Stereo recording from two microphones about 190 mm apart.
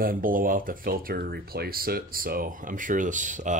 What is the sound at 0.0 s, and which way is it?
Speech, 45° right (ahead or behind).